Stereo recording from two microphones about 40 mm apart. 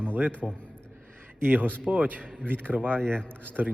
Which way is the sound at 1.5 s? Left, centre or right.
Right.